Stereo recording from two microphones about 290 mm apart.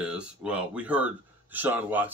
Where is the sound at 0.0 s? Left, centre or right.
Centre.